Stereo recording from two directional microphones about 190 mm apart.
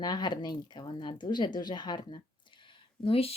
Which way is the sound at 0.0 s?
20° left (ahead or behind).